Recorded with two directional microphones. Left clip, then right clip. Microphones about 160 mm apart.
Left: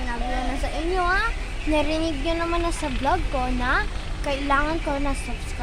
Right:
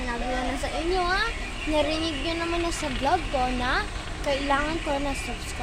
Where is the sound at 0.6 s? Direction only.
5° left (ahead or behind).